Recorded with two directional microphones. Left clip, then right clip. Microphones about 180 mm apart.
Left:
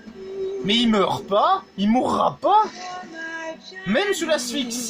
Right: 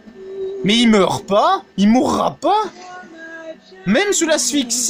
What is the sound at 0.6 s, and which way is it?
A woman's voice, 50° right (ahead or behind).